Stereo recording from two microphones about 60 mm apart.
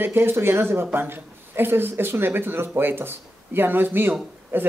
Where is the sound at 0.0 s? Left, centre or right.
Right.